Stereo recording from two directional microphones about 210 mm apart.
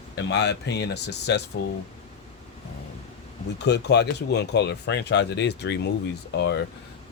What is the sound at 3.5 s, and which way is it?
Speech, 55° left (ahead or behind).